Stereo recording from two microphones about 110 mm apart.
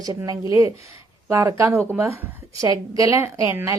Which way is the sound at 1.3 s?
25° right (ahead or behind).